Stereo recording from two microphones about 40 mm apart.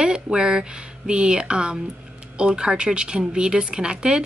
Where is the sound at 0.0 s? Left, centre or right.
Right.